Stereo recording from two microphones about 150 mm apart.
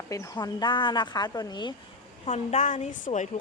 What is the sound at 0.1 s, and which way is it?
A woman's voice, 25° left (ahead or behind).